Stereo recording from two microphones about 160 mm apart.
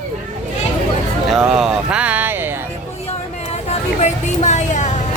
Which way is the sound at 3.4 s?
45° left (ahead or behind).